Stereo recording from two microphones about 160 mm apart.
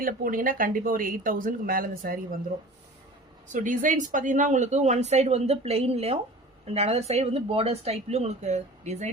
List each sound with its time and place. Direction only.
0.0 s speech: 60° right (ahead or behind)
3.5 s speech: 55° right (ahead or behind)